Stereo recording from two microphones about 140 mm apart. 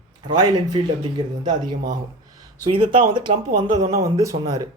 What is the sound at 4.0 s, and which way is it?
Speech, 25° right (ahead or behind).